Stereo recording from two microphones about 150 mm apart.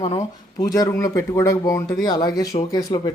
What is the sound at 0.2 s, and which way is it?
Speech, 20° left (ahead or behind).